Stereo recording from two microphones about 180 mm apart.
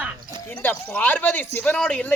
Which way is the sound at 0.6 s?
10° left (ahead or behind).